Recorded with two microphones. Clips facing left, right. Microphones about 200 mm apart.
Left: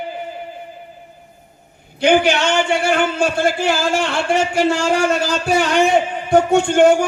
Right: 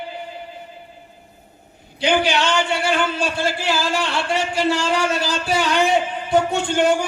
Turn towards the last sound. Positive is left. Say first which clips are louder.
# left 6 dB
turn(degrees=50)  # may be behind; listen again after turning